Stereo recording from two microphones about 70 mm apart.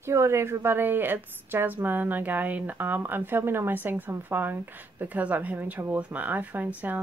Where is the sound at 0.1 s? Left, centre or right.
Right.